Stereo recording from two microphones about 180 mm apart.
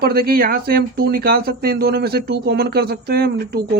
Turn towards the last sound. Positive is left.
turn(degrees=-60)  # may be behind; listen again after turning